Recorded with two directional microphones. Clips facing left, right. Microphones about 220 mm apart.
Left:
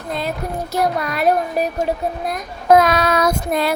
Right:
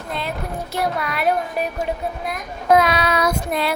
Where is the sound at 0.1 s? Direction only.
40° left (ahead or behind).